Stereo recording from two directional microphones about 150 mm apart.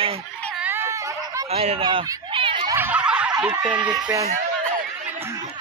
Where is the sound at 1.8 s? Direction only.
35° right (ahead or behind).